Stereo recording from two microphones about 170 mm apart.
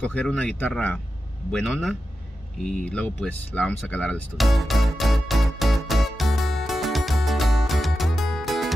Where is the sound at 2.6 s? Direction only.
5° left (ahead or behind).